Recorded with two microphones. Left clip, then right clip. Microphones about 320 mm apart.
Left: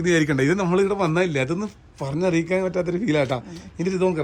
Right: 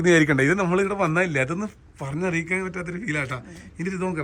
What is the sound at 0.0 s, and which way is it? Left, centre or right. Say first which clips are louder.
A man's voice: right 2 dB; centre.